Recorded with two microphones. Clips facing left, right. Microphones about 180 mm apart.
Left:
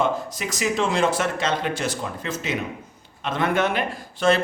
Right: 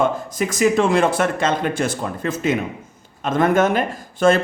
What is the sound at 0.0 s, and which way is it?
A man's voice, 50° right (ahead or behind).